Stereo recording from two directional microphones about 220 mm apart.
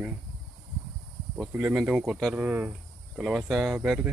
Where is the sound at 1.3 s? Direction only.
5° right (ahead or behind).